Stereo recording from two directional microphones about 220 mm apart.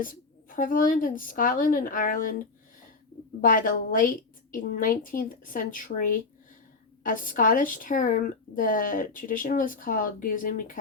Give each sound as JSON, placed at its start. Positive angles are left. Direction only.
{"t": 0.0, "sound": "speech", "side_deg": 40}
{"t": 3.4, "sound": "speech", "side_deg": 40}